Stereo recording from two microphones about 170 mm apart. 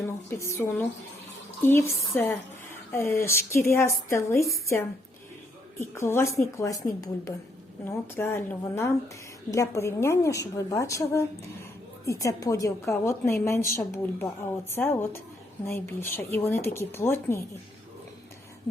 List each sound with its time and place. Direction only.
0.0 s a woman's voice: 15° left (ahead or behind)